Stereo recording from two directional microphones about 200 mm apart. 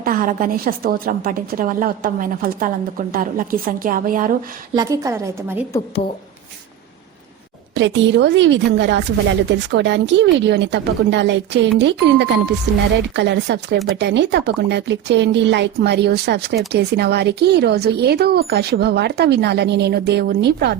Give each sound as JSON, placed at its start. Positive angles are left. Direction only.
{"t": 0.0, "sound": "a woman's voice", "side_deg": -45}
{"t": 4.7, "sound": "a woman's voice", "side_deg": -20}
{"t": 7.8, "sound": "speech", "side_deg": -65}